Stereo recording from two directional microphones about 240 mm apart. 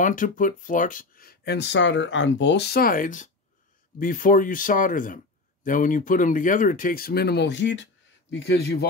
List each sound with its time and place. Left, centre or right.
0.0 s a man's voice: left